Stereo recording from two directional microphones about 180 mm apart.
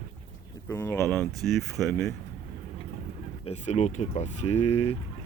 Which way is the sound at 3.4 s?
35° left (ahead or behind).